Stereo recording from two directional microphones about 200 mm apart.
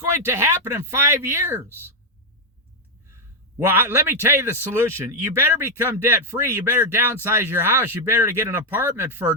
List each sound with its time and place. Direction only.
0.3 s a man's voice: 10° right (ahead or behind)
3.6 s a man's voice: 10° right (ahead or behind)